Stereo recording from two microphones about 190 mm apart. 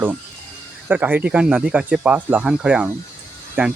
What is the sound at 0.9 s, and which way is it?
Speech, 10° right (ahead or behind).